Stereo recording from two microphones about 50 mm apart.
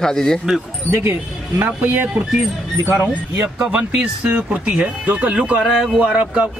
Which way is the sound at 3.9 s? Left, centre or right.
Centre.